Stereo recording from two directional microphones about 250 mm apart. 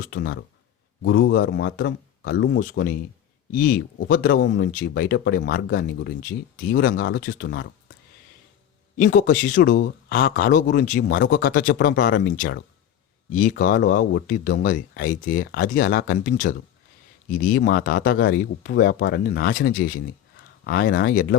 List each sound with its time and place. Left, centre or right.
0.0 s speech: left
9.0 s speech: left